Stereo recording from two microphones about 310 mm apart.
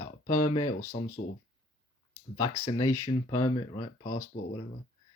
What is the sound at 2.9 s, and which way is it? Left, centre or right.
Speech, centre.